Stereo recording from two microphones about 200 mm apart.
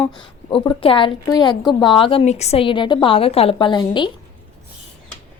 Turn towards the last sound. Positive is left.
turn(degrees=25)  # may be behind; listen again after turning